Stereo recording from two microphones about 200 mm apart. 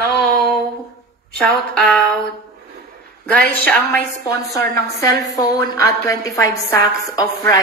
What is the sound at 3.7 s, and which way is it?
Speech, 5° left (ahead or behind).